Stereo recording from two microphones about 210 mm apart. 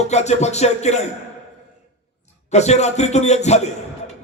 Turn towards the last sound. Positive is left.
turn(degrees=30)  # may be behind; listen again after turning